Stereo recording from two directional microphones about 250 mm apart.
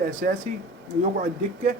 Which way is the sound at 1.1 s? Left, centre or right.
Right.